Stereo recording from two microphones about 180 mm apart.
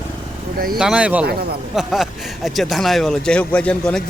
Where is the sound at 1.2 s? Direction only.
60° right (ahead or behind).